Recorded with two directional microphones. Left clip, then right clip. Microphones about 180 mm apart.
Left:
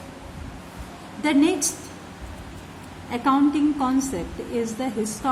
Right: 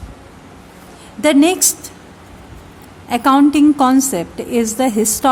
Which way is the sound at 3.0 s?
60° right (ahead or behind).